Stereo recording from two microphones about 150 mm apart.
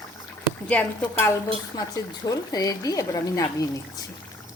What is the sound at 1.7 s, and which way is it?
Speech, 25° left (ahead or behind).